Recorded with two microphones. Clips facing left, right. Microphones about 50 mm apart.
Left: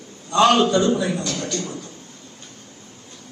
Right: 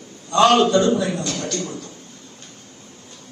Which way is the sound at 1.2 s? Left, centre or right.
Right.